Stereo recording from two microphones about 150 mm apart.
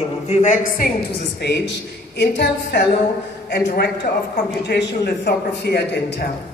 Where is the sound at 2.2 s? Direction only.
90° left.